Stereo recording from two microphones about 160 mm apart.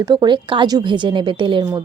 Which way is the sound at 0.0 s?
25° right (ahead or behind).